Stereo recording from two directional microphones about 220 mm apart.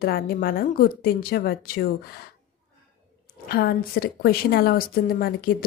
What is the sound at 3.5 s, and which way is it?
A woman's voice, 45° left (ahead or behind).